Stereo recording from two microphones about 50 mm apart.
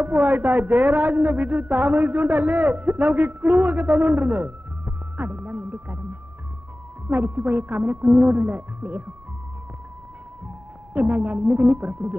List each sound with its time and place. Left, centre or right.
0.0 s a woman's voice: right
7.1 s a woman's voice: right
10.9 s a woman's voice: right